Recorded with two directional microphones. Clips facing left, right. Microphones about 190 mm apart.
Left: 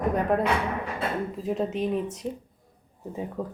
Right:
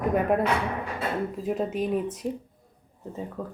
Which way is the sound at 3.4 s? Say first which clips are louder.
Left 3 dB; 20° left (ahead or behind).